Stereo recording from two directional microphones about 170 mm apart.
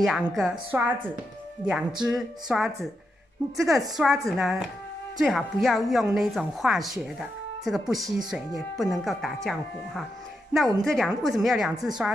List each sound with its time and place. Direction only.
0.0 s a woman's voice: centre (ahead or behind)